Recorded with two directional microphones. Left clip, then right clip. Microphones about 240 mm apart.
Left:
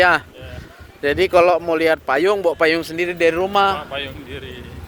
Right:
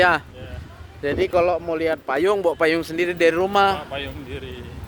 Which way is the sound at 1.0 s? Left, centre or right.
Centre.